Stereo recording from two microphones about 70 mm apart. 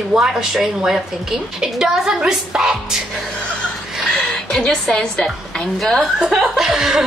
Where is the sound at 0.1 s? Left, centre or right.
Centre.